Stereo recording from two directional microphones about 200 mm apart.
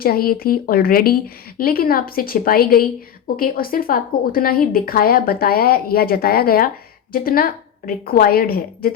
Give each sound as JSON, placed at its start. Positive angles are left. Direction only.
{"t": 0.0, "sound": "speech", "side_deg": 50}